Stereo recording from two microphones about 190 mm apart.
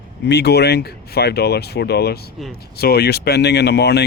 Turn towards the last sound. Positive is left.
turn(degrees=60)  # may be behind; listen again after turning